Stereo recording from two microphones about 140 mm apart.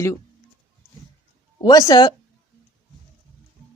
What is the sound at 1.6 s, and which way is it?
Speech, 25° left (ahead or behind).